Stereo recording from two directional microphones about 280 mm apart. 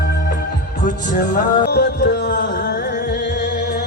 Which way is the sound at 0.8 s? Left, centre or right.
Left.